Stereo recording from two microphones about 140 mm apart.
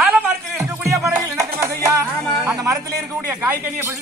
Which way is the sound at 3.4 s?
20° right (ahead or behind).